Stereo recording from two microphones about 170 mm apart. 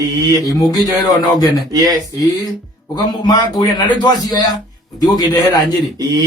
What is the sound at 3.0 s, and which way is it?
A man's voice, 25° left (ahead or behind).